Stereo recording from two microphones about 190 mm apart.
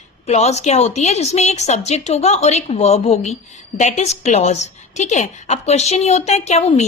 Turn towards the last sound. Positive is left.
turn(degrees=35)  # may be behind; listen again after turning